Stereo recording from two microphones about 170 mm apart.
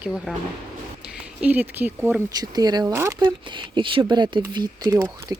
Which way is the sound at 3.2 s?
30° right (ahead or behind).